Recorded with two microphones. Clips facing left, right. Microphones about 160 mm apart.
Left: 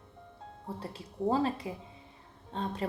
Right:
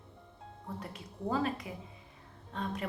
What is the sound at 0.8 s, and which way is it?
A woman's voice, 30° left (ahead or behind).